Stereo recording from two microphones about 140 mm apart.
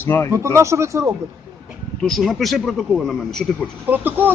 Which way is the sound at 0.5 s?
20° right (ahead or behind).